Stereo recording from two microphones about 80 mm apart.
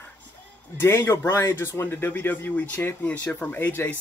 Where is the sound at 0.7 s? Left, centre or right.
Left.